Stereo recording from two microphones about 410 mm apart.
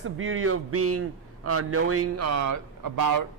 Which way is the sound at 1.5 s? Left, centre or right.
Right.